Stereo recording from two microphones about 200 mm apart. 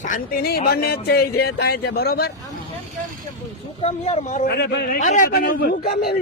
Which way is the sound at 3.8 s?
30° left (ahead or behind).